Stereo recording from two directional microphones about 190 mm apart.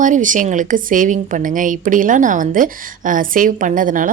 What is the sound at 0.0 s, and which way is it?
A woman's voice, 40° right (ahead or behind).